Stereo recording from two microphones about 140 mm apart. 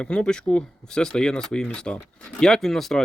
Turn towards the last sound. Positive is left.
turn(degrees=0)  # may be behind; listen again after turning